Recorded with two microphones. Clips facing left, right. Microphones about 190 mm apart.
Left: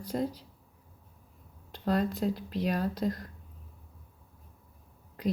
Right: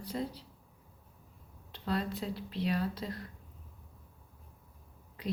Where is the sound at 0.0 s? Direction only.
45° left (ahead or behind).